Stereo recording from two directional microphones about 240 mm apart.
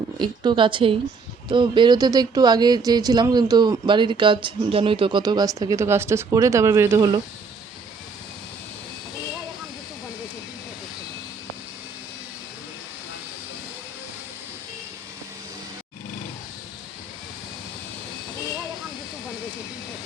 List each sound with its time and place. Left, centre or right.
0.2 s a woman's voice: centre